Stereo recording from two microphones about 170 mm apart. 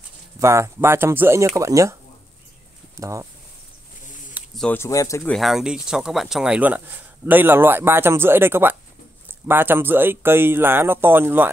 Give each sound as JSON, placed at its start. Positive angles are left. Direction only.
{"t": 0.4, "sound": "speech", "side_deg": -15}
{"t": 3.0, "sound": "speech", "side_deg": -20}
{"t": 4.6, "sound": "speech", "side_deg": 10}
{"t": 5.3, "sound": "speech", "side_deg": 0}